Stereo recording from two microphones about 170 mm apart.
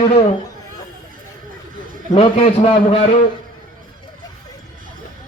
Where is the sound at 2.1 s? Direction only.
35° left (ahead or behind).